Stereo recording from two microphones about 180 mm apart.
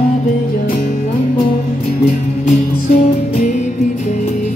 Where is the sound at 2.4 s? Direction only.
40° left (ahead or behind).